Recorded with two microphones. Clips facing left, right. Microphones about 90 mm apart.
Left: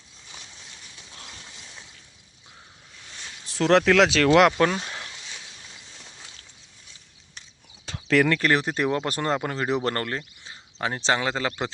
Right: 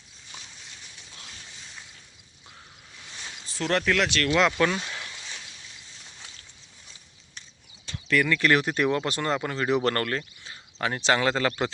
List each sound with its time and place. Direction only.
3.4 s speech: 85° left
4.5 s speech: 30° left (ahead or behind)
5.1 s a sound: 5° right (ahead or behind)
7.9 s a sound: 90° left
8.4 s speech: 30° left (ahead or behind)
9.8 s speech: 20° left (ahead or behind)
11.2 s speech: 15° left (ahead or behind)